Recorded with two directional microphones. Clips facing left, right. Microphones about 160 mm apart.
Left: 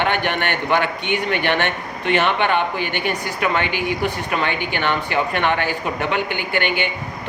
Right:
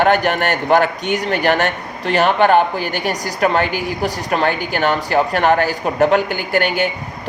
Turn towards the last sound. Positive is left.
turn(degrees=-40)  # may be behind; listen again after turning